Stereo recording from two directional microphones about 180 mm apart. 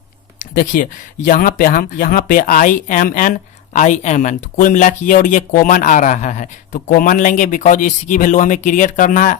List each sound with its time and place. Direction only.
0.3 s speech: 45° left (ahead or behind)